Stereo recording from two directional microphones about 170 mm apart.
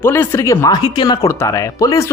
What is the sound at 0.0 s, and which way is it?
Speech, 15° left (ahead or behind).